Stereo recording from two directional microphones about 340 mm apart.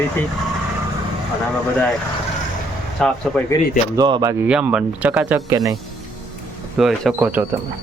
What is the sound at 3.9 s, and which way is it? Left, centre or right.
Speech, centre.